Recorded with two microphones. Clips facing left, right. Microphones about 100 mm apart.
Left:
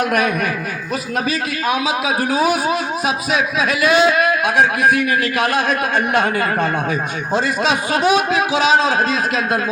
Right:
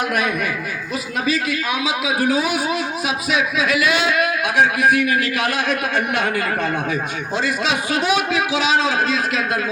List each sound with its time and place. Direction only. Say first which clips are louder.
0.0 s a man's voice: left 4 dB; 45° left (ahead or behind)
1.6 s a man's voice: left 3 dB; 40° left (ahead or behind)